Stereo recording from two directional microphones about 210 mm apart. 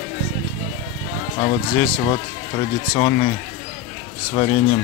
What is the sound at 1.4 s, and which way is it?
Speech, 30° left (ahead or behind).